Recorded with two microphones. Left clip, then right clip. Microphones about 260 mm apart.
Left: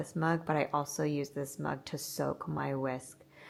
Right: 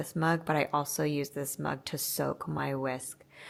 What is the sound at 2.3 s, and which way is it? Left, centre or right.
Speech, right.